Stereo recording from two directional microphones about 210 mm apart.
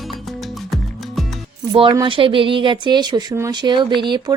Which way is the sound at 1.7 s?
20° right (ahead or behind).